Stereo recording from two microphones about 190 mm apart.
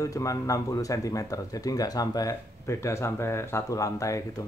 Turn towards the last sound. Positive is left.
turn(degrees=15)  # may be behind; listen again after turning